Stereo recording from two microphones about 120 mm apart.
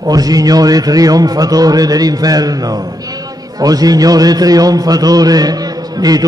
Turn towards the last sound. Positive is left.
turn(degrees=-30)  # may be behind; listen again after turning